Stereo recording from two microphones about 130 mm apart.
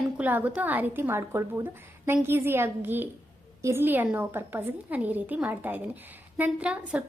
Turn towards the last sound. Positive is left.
turn(degrees=-10)  # may be behind; listen again after turning